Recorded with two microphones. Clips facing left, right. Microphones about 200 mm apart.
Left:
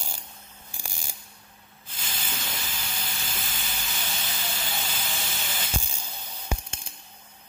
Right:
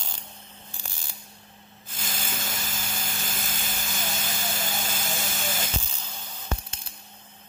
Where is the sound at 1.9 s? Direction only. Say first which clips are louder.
Right 2 dB; 45° right (ahead or behind).